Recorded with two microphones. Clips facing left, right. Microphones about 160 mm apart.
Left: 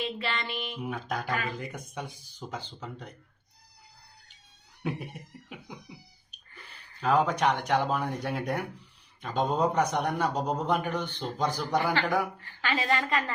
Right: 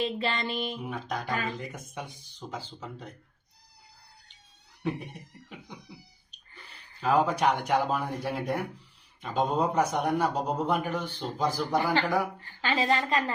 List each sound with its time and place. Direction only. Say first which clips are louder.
0.0 s music: right 3 dB; 35° right (ahead or behind)
0.9 s a man's voice: left 1 dB; centre (ahead or behind)
4.8 s music: right 2 dB; 5° left (ahead or behind)
7.0 s a man's voice: even; 5° right (ahead or behind)
12.4 s a woman's voice: right 2 dB; 30° right (ahead or behind)